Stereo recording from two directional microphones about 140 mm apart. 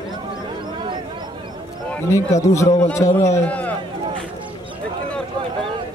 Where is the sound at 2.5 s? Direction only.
20° left (ahead or behind).